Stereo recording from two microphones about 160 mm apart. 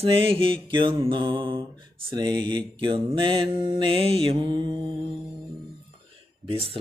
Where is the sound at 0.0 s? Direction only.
35° right (ahead or behind).